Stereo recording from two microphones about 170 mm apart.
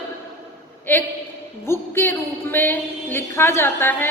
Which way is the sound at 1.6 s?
15° left (ahead or behind).